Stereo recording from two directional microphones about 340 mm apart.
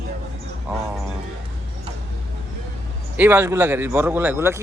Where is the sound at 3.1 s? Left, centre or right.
Centre.